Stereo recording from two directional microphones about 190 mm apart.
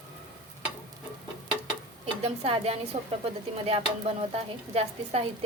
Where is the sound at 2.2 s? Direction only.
30° right (ahead or behind).